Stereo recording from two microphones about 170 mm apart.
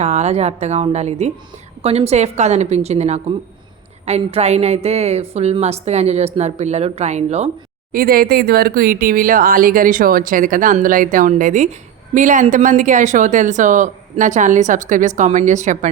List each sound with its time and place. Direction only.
0.0 s a woman's voice: 40° right (ahead or behind)
7.9 s speech: 60° right (ahead or behind); by 15.9 s 45° right (ahead or behind)